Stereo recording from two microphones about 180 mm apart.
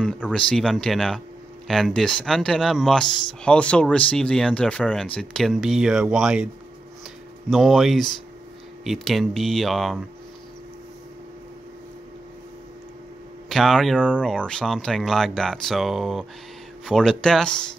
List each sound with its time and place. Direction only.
0.0 s speech: 5° left (ahead or behind)
13.5 s speech: centre (ahead or behind)